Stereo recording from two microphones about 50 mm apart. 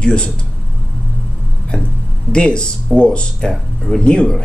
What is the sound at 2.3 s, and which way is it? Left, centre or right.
Speech, centre.